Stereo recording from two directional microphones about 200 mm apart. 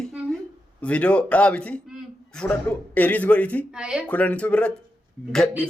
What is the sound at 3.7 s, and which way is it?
Speech, 5° right (ahead or behind).